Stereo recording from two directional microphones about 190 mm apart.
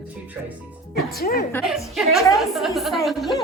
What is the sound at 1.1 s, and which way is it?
Speech, 50° left (ahead or behind).